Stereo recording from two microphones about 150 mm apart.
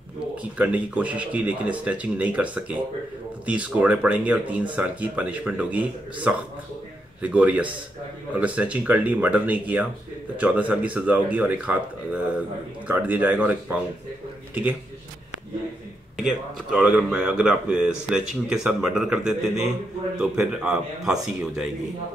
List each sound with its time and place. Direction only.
0.4 s a man's voice: 10° right (ahead or behind)
16.2 s speech: 5° right (ahead or behind)